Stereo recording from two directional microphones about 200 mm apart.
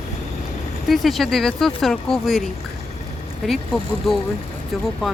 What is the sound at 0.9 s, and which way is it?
Speech, centre (ahead or behind).